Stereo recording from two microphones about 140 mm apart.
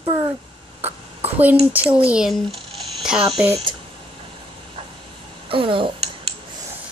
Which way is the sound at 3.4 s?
45° right (ahead or behind).